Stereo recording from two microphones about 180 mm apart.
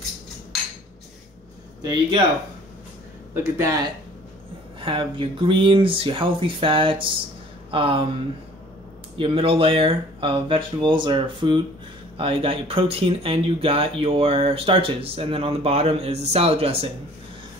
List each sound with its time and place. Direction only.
1.9 s speech: 25° right (ahead or behind)
3.5 s speech: 20° right (ahead or behind)
9.1 s speech: 30° right (ahead or behind)